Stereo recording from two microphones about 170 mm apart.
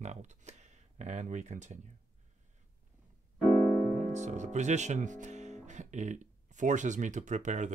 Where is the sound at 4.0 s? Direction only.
45° right (ahead or behind).